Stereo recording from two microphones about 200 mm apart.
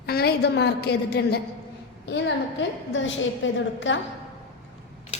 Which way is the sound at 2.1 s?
65° left (ahead or behind).